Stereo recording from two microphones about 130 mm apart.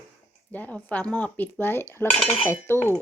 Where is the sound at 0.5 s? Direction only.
10° left (ahead or behind).